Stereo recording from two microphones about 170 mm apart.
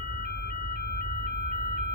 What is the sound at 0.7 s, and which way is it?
Vehicle, 65° left (ahead or behind).